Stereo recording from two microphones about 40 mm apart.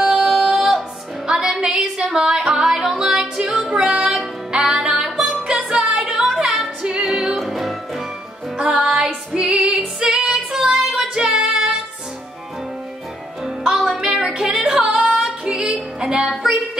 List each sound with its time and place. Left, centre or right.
0.3 s music: centre
3.2 s music: centre
5.5 s music: right; by 8.0 s centre
8.5 s music: centre
13.4 s music: centre